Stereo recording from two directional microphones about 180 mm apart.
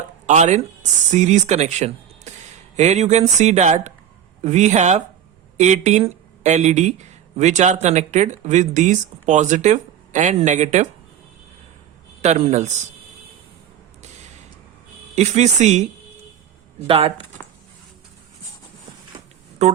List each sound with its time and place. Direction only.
0.3 s speech: 40° right (ahead or behind)
12.2 s speech: 35° right (ahead or behind)
15.1 s speech: 40° right (ahead or behind)
19.1 s a sound: 25° right (ahead or behind)